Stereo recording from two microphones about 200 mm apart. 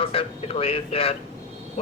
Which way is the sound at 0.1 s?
30° left (ahead or behind).